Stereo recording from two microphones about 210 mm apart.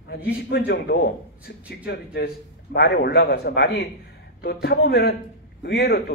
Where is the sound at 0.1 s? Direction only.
50° left (ahead or behind).